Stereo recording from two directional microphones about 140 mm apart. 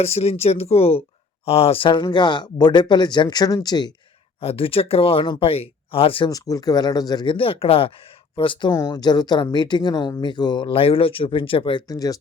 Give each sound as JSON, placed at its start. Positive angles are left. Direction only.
{"t": 0.0, "sound": "speech", "side_deg": 45}
{"t": 4.4, "sound": "speech", "side_deg": 45}
{"t": 6.3, "sound": "speech", "side_deg": 25}
{"t": 8.7, "sound": "speech", "side_deg": 25}
{"t": 11.9, "sound": "speech", "side_deg": 25}